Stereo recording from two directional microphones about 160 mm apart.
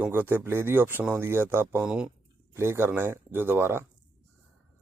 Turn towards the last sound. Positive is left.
turn(degrees=-15)  # may be behind; listen again after turning